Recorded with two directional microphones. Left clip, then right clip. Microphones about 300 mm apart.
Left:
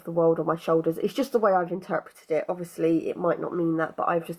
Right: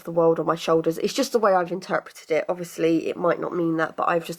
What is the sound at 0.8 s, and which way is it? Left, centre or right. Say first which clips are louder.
Speech: right 3 dB; centre.